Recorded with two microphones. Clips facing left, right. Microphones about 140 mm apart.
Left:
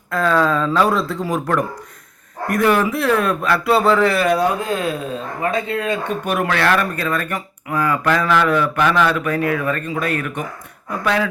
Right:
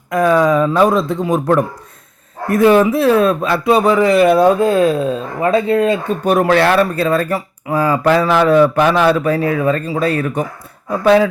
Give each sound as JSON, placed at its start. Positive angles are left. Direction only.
{"t": 0.1, "sound": "speech", "side_deg": -15}
{"t": 4.4, "sound": "speech", "side_deg": -30}